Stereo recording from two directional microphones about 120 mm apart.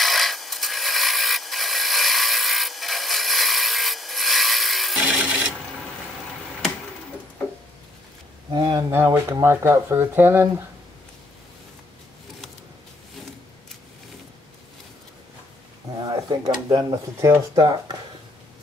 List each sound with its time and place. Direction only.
0.0 s wood: centre (ahead or behind)
8.5 s speech: 40° right (ahead or behind)
8.9 s speech: 20° right (ahead or behind)
16.0 s speech: 35° right (ahead or behind)